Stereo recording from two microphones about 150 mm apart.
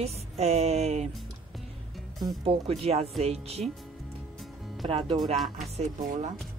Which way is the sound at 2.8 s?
45° right (ahead or behind).